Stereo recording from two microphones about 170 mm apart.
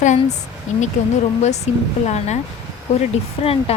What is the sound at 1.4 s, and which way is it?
Speech, 40° left (ahead or behind).